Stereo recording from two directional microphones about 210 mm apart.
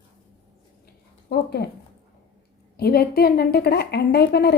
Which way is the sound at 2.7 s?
50° left (ahead or behind).